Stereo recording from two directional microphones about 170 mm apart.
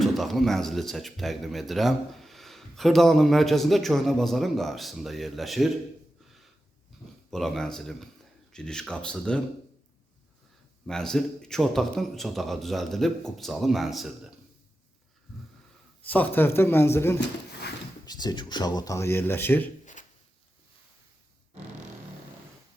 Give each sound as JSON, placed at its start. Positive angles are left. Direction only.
{"t": 0.0, "sound": "speech", "side_deg": 0}
{"t": 7.3, "sound": "speech", "side_deg": 0}
{"t": 10.8, "sound": "speech", "side_deg": 5}
{"t": 16.0, "sound": "speech", "side_deg": 10}
{"t": 19.8, "sound": "a sound", "side_deg": 45}